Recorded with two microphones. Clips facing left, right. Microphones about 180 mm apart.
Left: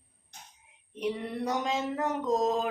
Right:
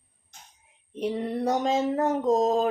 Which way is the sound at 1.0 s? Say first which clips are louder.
Right 4 dB; 40° right (ahead or behind).